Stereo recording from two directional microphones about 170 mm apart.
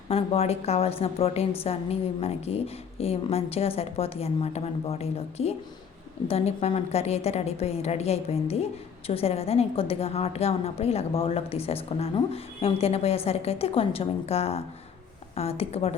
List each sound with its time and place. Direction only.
0.1 s a woman's voice: 35° left (ahead or behind)